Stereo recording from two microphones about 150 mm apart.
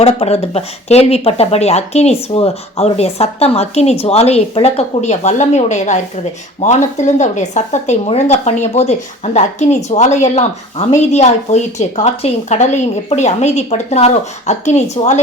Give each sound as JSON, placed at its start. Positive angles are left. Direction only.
{"t": 0.0, "sound": "speech", "side_deg": 45}